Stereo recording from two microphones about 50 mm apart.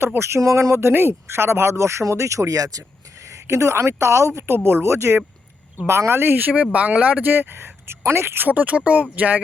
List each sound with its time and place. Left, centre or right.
0.2 s speech: right
4.5 s speech: right
6.7 s speech: right
8.4 s speech: right